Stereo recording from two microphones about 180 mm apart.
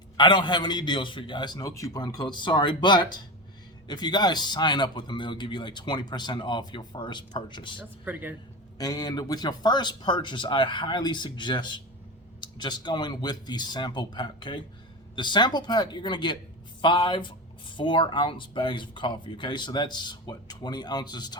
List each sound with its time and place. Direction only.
0.2 s a man's voice: 25° left (ahead or behind)
7.8 s speech: 10° right (ahead or behind)
8.8 s a man's voice: 20° left (ahead or behind)